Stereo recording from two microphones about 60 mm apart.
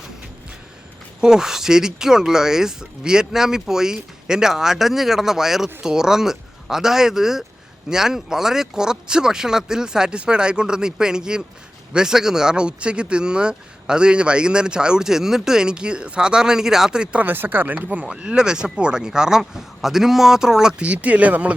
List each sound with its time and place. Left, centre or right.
1.2 s speech: centre
17.2 s speech: right
18.0 s speech: centre